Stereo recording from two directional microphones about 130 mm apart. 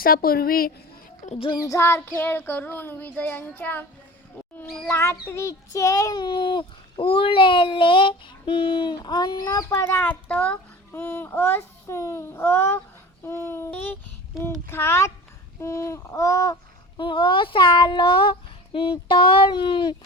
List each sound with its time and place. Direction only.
1.2 s child singing: 70° left (ahead or behind)
1.5 s child singing: 25° left (ahead or behind)
5.2 s speech: 20° left (ahead or behind)
17.0 s speech: 40° left (ahead or behind)